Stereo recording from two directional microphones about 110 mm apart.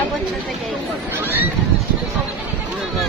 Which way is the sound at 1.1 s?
20° right (ahead or behind).